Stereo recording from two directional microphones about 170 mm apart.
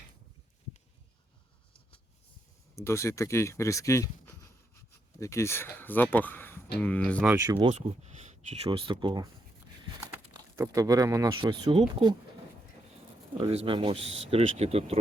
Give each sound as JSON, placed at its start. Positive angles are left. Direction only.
{"t": 2.7, "sound": "speech", "side_deg": 15}
{"t": 7.2, "sound": "speech", "side_deg": -10}
{"t": 7.4, "sound": "speech", "side_deg": -20}
{"t": 7.7, "sound": "speech", "side_deg": -40}
{"t": 10.6, "sound": "speech", "side_deg": -20}
{"t": 13.4, "sound": "speech", "side_deg": -35}